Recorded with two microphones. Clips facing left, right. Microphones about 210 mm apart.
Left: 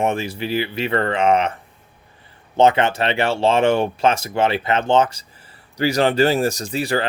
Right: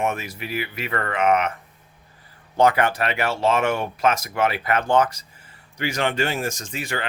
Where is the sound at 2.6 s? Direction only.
25° left (ahead or behind).